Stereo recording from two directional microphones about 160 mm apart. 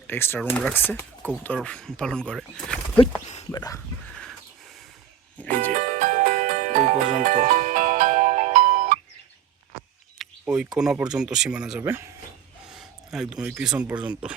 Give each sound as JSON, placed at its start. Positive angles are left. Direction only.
{"t": 0.1, "sound": "speech", "side_deg": 15}
{"t": 3.5, "sound": "a sound", "side_deg": 25}
{"t": 4.1, "sound": "crow", "side_deg": 5}
{"t": 5.4, "sound": "music", "side_deg": 10}
{"t": 5.7, "sound": "music", "side_deg": -55}
{"t": 10.2, "sound": "a sound", "side_deg": -5}
{"t": 10.8, "sound": "speech", "side_deg": -5}
{"t": 11.8, "sound": "speech", "side_deg": -15}
{"t": 12.6, "sound": "speech", "side_deg": -5}